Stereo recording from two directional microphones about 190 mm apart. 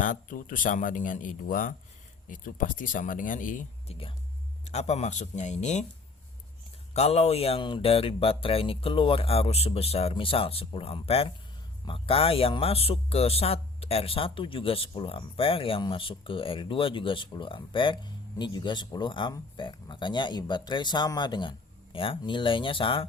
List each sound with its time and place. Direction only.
0.0 s speech: 45° left (ahead or behind)
6.9 s speech: 35° left (ahead or behind)